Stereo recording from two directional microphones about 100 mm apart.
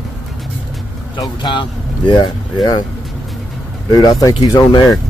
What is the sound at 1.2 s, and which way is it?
Speech, 50° left (ahead or behind).